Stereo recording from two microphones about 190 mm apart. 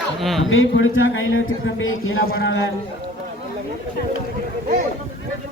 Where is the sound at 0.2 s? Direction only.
Centre (ahead or behind).